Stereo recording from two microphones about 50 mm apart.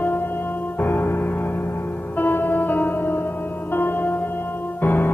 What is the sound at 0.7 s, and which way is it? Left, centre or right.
Music, left.